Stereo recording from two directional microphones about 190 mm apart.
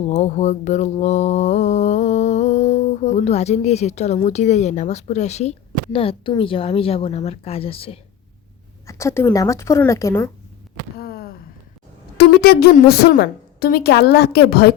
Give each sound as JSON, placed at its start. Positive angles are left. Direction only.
{"t": 0.1, "sound": "mantra", "side_deg": 40}
{"t": 8.9, "sound": "a woman's voice", "side_deg": 15}
{"t": 10.9, "sound": "a sound", "side_deg": 55}
{"t": 12.1, "sound": "a woman's voice", "side_deg": 55}